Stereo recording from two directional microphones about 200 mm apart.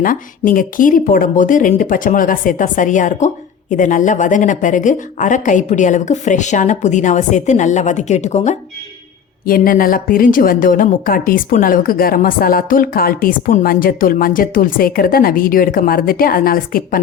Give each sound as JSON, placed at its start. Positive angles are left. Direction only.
{"t": 0.0, "sound": "speech", "side_deg": 45}
{"t": 9.5, "sound": "a woman's voice", "side_deg": 45}